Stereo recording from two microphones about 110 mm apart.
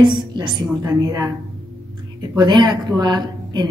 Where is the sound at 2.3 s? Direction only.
40° right (ahead or behind).